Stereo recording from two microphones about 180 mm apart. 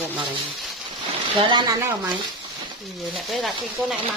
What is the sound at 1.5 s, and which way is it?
Speech, 25° right (ahead or behind).